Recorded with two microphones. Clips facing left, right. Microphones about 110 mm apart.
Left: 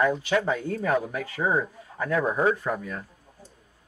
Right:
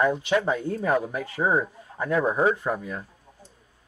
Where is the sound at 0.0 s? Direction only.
15° right (ahead or behind).